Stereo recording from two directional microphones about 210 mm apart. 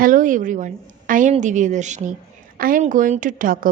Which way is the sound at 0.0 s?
40° right (ahead or behind).